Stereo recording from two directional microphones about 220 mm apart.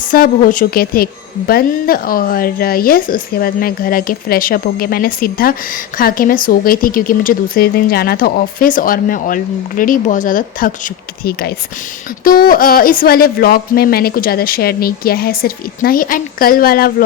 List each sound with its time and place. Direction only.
0.1 s a woman's voice: 40° left (ahead or behind)